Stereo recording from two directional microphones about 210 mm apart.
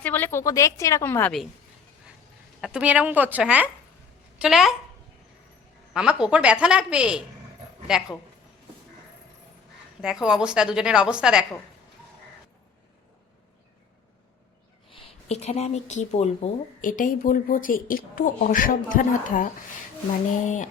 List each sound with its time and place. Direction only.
0.0 s a woman's voice: 10° left (ahead or behind)
2.6 s a woman's voice: 5° right (ahead or behind)
5.9 s a woman's voice: 5° right (ahead or behind)
10.0 s a woman's voice: 5° right (ahead or behind)
15.3 s speech: 30° left (ahead or behind)